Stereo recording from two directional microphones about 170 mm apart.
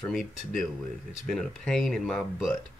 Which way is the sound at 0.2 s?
55° left (ahead or behind).